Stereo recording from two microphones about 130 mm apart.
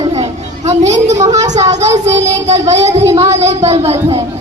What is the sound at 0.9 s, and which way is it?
Speech, 60° right (ahead or behind).